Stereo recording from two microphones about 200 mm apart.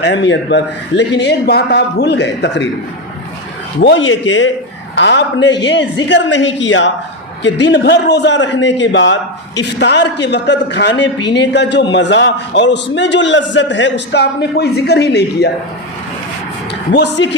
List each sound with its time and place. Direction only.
0.0 s a man's voice: 65° left (ahead or behind)
3.8 s a man's voice: 65° left (ahead or behind)
16.9 s a man's voice: 60° left (ahead or behind)